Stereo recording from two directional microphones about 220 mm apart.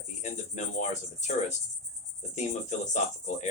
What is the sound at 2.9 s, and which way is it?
Speech, 30° left (ahead or behind).